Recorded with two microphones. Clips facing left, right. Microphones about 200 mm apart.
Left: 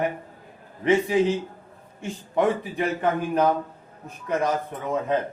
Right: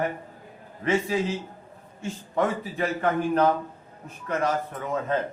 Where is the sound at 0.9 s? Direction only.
15° left (ahead or behind).